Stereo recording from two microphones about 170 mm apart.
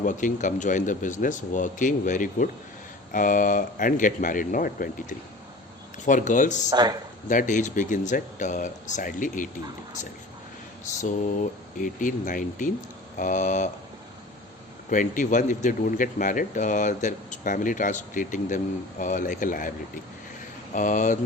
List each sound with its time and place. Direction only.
0.0 s speech: 50° left (ahead or behind)
6.7 s speech: 25° right (ahead or behind)
7.3 s speech: 50° left (ahead or behind)
11.0 s speech: 45° left (ahead or behind)
14.8 s speech: 50° left (ahead or behind)
20.7 s speech: 50° left (ahead or behind)